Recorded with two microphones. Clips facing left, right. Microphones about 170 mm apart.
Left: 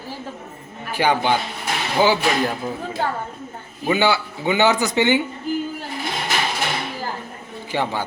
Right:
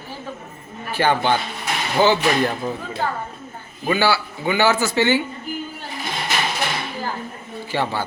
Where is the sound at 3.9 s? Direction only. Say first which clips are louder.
Left 1 dB; 20° left (ahead or behind).